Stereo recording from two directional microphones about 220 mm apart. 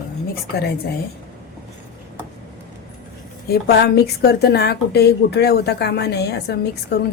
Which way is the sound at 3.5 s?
45° left (ahead or behind).